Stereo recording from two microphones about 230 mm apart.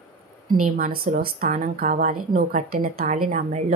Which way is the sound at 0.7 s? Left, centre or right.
Right.